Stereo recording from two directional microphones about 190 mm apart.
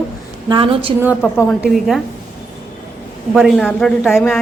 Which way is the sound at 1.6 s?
Centre (ahead or behind).